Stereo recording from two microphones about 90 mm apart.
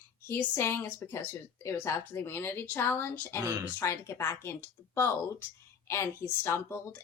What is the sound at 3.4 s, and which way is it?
Speech, 20° right (ahead or behind).